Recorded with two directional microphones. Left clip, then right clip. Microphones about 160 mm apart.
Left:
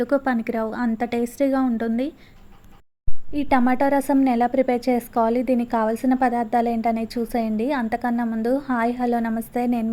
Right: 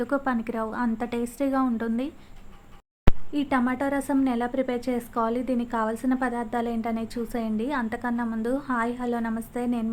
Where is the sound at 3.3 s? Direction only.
25° left (ahead or behind).